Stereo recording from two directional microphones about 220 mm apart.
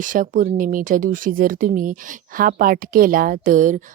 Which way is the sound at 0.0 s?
35° right (ahead or behind).